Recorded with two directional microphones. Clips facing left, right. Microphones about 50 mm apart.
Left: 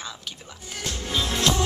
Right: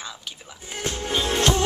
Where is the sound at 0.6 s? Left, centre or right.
Right.